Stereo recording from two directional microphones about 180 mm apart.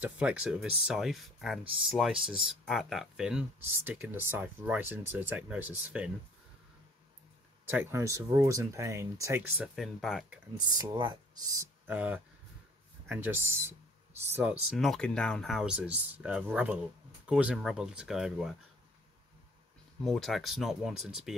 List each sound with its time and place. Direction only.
0.0 s speech: 5° right (ahead or behind)
7.7 s speech: 15° right (ahead or behind)
9.8 s speech: centre (ahead or behind)
10.8 s speech: 25° right (ahead or behind)
11.9 s speech: 10° right (ahead or behind)
14.8 s speech: 5° left (ahead or behind)
20.0 s speech: centre (ahead or behind)